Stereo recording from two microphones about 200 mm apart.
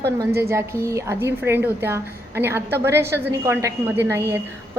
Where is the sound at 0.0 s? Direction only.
15° right (ahead or behind).